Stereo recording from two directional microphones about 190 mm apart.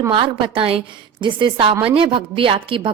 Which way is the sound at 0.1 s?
30° right (ahead or behind).